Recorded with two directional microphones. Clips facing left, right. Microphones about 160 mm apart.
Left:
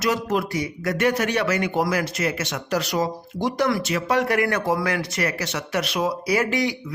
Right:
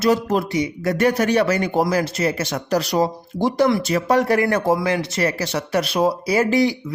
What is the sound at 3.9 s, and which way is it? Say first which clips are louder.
Speech: right 4 dB; 40° right (ahead or behind).